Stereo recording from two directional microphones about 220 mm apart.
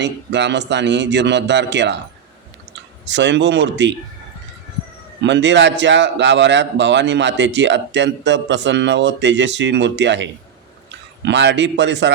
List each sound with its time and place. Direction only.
0.0 s a man's voice: 55° right (ahead or behind)
3.1 s a man's voice: 55° right (ahead or behind)
5.2 s a man's voice: 55° right (ahead or behind)
11.3 s a man's voice: 55° right (ahead or behind)